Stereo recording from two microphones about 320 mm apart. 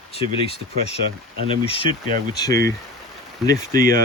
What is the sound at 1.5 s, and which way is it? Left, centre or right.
Speech, centre.